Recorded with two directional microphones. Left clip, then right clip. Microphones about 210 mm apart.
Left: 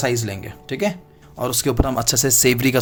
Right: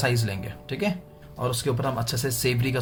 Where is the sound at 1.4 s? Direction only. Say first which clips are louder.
Left 6 dB; 50° left (ahead or behind).